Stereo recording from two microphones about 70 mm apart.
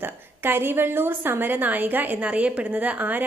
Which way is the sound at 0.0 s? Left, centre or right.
Right.